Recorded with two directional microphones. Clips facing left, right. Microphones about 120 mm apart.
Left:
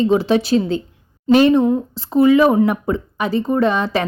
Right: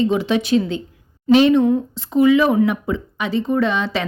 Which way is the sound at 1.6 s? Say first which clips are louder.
Even; 30° left (ahead or behind).